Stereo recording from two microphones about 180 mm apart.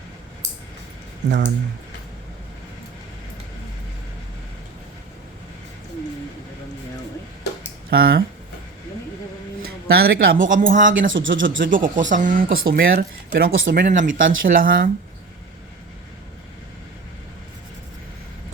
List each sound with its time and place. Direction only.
1.3 s speech: 80° right
7.9 s speech: 55° right (ahead or behind)
9.8 s speech: 60° right (ahead or behind)
11.1 s speech: 90° right
11.4 s speech: 50° right (ahead or behind); by 13.7 s 75° right (ahead or behind)
13.7 s speech: 50° right (ahead or behind)